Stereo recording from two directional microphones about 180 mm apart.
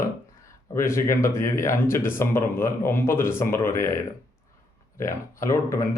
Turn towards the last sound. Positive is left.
turn(degrees=15)  # may be behind; listen again after turning